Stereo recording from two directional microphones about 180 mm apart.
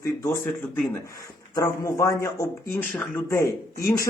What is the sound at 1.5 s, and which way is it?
A man's voice, 20° left (ahead or behind).